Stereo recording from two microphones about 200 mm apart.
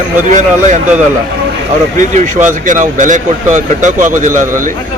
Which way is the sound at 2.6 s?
40° right (ahead or behind).